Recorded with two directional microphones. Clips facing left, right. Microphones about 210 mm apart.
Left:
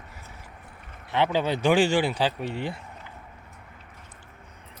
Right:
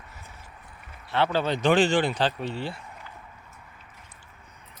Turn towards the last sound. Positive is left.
turn(degrees=15)  # may be behind; listen again after turning